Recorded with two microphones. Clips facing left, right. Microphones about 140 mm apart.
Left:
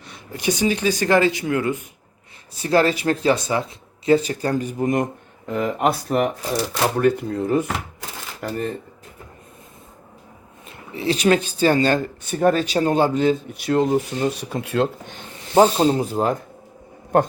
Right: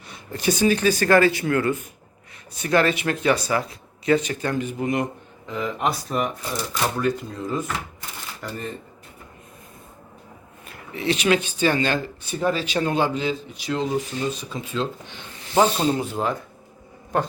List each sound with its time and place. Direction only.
0.3 s speech: 15° left (ahead or behind)
2.6 s speech: 30° left (ahead or behind); by 8.7 s 60° left (ahead or behind)
10.7 s speech: 30° left (ahead or behind); by 14.8 s 65° left (ahead or behind)
15.5 s speech: 30° left (ahead or behind)